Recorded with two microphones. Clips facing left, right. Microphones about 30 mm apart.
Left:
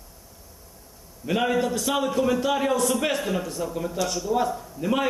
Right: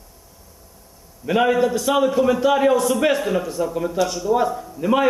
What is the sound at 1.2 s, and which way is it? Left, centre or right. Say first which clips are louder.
Speech: right 6 dB; centre.